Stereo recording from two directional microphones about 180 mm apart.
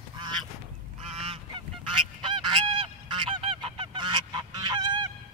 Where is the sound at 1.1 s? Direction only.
30° right (ahead or behind).